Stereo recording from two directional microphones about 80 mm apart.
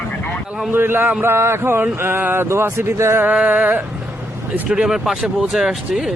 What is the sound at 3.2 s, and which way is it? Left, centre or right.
Speech, right.